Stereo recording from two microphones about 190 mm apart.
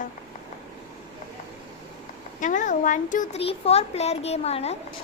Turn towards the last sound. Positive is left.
turn(degrees=35)  # may be behind; listen again after turning